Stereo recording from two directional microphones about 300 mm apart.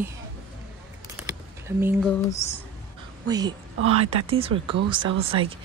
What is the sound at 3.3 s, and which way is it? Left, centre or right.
A woman's voice, centre.